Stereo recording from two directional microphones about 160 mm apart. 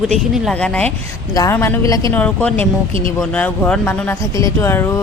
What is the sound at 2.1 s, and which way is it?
Speech, 10° left (ahead or behind).